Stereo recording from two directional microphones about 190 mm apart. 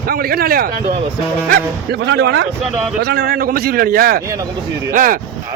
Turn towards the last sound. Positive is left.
turn(degrees=-45)  # may be behind; listen again after turning